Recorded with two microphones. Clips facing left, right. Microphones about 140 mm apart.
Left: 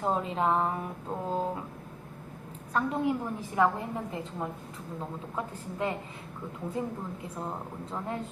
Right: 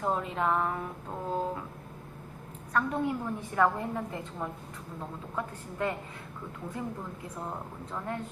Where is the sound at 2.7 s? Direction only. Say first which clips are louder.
Left 1 dB; 25° left (ahead or behind).